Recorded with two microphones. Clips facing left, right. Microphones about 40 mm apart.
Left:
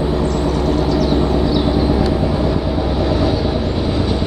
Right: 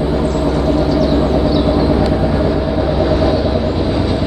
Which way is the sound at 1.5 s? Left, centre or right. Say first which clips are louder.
Right 3 dB; centre.